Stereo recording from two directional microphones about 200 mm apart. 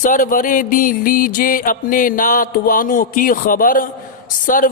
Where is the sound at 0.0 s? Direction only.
40° left (ahead or behind).